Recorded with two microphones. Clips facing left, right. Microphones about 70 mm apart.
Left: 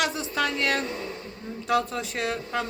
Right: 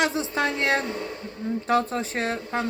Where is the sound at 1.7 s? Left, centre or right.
Right.